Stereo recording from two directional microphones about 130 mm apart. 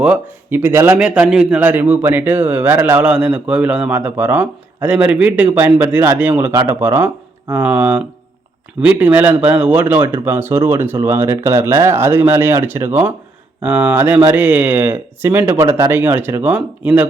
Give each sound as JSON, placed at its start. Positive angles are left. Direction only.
{"t": 0.0, "sound": "a man's voice", "side_deg": -10}